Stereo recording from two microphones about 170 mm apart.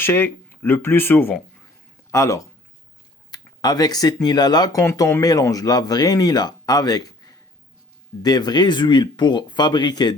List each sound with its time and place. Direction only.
0.0 s speech: 15° left (ahead or behind)